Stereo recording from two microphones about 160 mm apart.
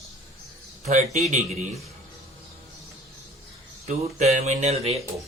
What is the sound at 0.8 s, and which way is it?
Speech, 45° right (ahead or behind).